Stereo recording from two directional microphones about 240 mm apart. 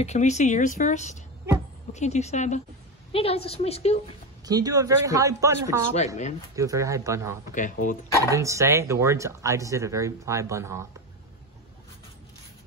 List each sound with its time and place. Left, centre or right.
0.0 s speech: left
4.5 s speech: centre
7.5 s speech: left
8.2 s speech: centre